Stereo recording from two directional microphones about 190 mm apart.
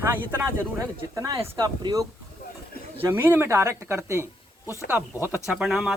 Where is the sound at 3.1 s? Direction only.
10° right (ahead or behind).